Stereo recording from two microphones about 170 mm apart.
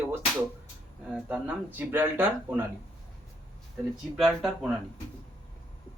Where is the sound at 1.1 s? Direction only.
10° right (ahead or behind).